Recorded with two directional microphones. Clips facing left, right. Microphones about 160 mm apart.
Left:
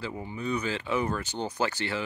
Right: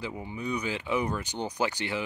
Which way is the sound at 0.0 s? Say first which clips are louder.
Left 1 dB; 15° right (ahead or behind).